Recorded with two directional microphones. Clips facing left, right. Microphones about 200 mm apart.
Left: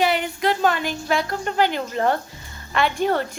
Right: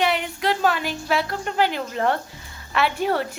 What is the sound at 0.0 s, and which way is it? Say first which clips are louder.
A woman's voice: left 2 dB; centre (ahead or behind).